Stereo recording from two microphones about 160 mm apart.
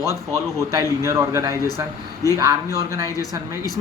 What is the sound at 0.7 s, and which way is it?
Speech, 20° right (ahead or behind).